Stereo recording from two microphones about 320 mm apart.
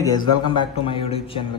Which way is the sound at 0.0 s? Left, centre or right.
Centre.